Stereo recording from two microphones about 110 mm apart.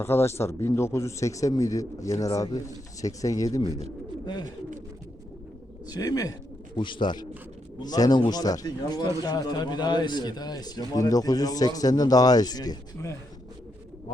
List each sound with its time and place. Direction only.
0.0 s a man's voice: 20° left (ahead or behind)
5.9 s a man's voice: 35° left (ahead or behind)
6.7 s a man's voice: 45° left (ahead or behind)